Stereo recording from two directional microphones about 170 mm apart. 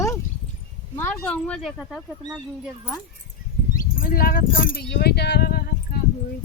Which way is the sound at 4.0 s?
55° left (ahead or behind).